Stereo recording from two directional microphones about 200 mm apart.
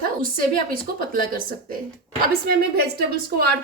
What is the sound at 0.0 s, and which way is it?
A woman's voice, 45° right (ahead or behind).